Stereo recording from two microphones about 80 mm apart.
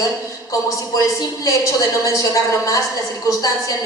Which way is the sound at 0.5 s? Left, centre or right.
Left.